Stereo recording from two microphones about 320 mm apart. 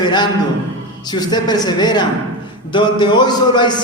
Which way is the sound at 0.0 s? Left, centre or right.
Centre.